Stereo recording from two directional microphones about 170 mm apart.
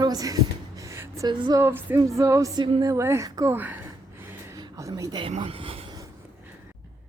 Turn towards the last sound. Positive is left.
turn(degrees=-35)  # may be behind; listen again after turning